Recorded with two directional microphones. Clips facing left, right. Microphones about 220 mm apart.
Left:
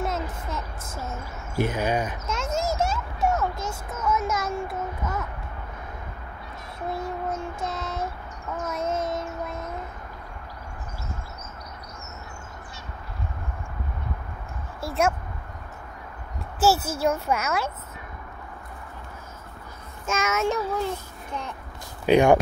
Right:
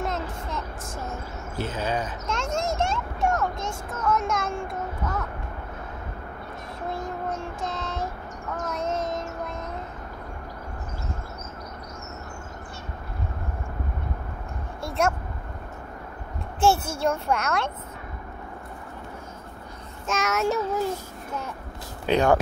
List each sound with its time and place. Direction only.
0.0 s a sound: centre (ahead or behind)
1.6 s speech: 15° left (ahead or behind)
2.2 s a sound: centre (ahead or behind)
6.9 s child singing: centre (ahead or behind)
14.8 s speech: centre (ahead or behind)
16.5 s child singing: 5° left (ahead or behind)
20.1 s child singing: centre (ahead or behind)
22.0 s speech: 10° left (ahead or behind)